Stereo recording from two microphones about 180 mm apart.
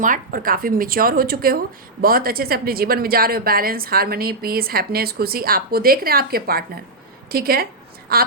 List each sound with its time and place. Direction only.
0.0 s a woman's voice: 50° right (ahead or behind)